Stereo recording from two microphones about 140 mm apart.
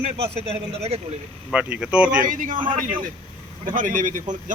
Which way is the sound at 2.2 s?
70° right (ahead or behind).